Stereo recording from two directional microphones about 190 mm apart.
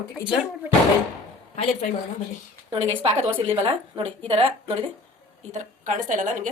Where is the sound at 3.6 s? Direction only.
30° right (ahead or behind).